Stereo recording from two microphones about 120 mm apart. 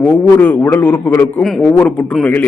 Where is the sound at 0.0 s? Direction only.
15° left (ahead or behind).